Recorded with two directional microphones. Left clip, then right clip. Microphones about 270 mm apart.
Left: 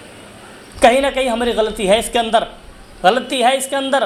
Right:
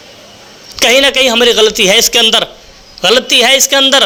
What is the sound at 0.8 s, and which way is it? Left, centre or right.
A man's voice, right.